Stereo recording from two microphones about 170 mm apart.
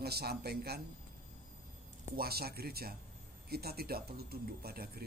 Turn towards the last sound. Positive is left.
turn(degrees=-65)  # may be behind; listen again after turning